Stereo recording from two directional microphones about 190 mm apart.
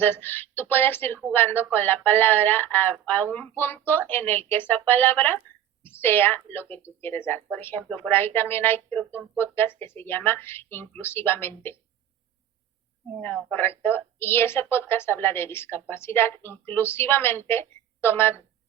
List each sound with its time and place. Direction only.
0.0 s speech: 10° left (ahead or behind)
13.2 s speech: 10° left (ahead or behind)